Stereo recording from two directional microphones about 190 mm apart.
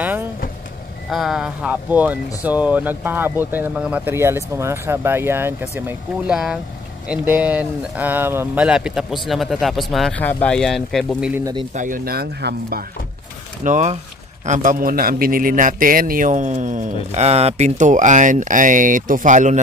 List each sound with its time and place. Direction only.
0.0 s vehicle: 10° right (ahead or behind)
1.1 s speech: centre (ahead or behind)
11.7 s speech: 45° right (ahead or behind)
13.7 s a man's voice: 40° right (ahead or behind)